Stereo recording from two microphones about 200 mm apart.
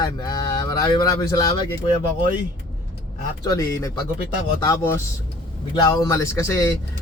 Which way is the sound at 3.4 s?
15° left (ahead or behind).